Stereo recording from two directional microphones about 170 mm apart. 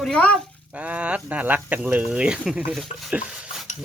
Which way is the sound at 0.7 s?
10° right (ahead or behind).